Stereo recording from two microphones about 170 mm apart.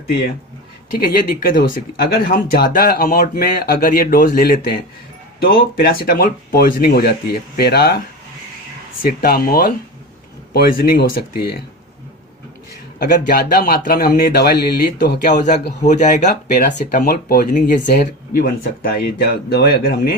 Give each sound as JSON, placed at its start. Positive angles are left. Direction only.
{"t": 0.9, "sound": "speech", "side_deg": 60}
{"t": 9.0, "sound": "speech", "side_deg": 60}
{"t": 13.0, "sound": "speech", "side_deg": 60}
{"t": 15.2, "sound": "speech", "side_deg": 45}
{"t": 17.0, "sound": "speech", "side_deg": 65}